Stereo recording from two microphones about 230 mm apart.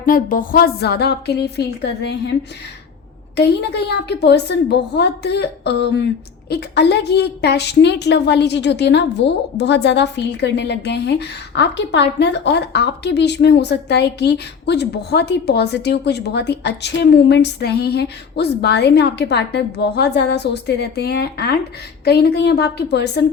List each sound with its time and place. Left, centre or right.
0.0 s a woman's voice: left
3.3 s a woman's voice: left